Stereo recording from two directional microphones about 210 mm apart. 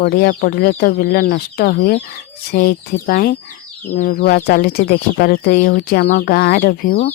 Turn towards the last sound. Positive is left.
turn(degrees=45)  # may be behind; listen again after turning